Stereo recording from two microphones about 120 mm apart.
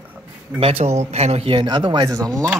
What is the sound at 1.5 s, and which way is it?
Speech, 35° right (ahead or behind).